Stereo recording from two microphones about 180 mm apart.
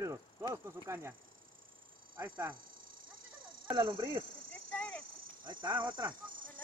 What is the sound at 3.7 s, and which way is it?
Speech, 25° right (ahead or behind).